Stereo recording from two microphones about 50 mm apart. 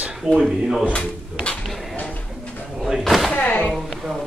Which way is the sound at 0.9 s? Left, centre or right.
Left.